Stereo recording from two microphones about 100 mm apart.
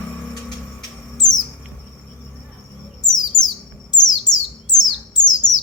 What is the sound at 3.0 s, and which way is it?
Chirp, 45° left (ahead or behind).